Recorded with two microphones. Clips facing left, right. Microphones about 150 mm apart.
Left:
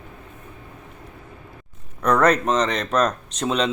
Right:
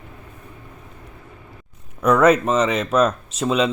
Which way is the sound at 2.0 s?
5° right (ahead or behind).